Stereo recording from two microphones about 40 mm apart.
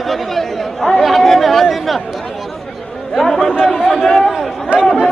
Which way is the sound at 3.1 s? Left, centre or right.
Centre.